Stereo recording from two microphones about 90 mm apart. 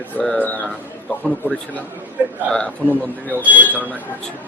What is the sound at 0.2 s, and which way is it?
Speech, 15° left (ahead or behind).